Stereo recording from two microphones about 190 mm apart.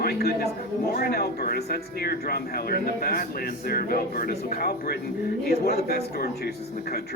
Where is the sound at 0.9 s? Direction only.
50° left (ahead or behind).